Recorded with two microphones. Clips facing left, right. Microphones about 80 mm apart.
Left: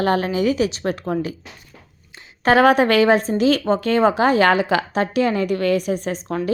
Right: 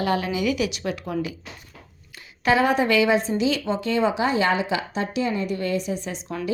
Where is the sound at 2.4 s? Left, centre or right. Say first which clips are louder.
Left 6 dB; left.